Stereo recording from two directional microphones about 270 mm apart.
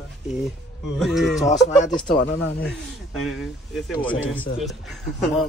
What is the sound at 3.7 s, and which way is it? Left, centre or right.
Speech, centre.